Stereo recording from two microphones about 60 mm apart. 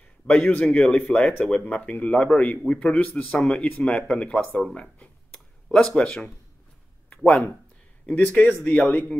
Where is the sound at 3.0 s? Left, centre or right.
Left.